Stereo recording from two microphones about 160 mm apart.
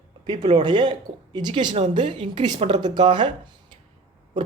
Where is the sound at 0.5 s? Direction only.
30° right (ahead or behind).